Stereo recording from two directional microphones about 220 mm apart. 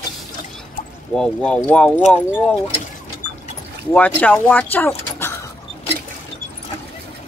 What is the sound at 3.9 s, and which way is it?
Speech, 5° left (ahead or behind).